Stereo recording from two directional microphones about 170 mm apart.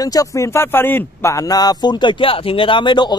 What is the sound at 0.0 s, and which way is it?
Speech, 20° left (ahead or behind).